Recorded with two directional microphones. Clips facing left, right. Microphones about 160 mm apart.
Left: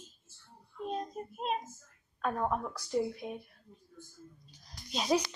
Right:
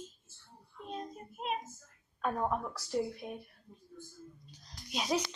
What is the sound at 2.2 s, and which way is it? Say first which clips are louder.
A woman's voice: left 1 dB; centre (ahead or behind).